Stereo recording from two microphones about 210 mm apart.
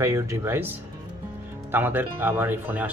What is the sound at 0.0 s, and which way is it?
Speech, 15° right (ahead or behind).